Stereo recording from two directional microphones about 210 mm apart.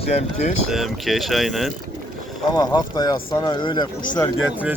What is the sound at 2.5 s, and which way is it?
Speech, 20° left (ahead or behind).